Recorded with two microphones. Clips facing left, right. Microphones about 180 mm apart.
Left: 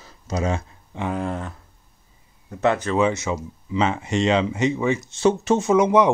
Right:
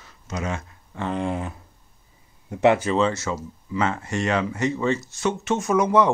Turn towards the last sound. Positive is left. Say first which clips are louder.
# left 2 dB
turn(degrees=20)  # may be behind; listen again after turning